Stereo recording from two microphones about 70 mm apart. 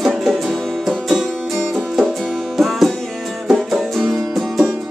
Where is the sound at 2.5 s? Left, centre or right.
Centre.